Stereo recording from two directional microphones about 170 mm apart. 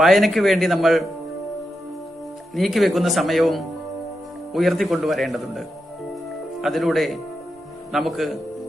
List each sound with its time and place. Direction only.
0.0 s speech: centre (ahead or behind)
2.5 s speech: centre (ahead or behind)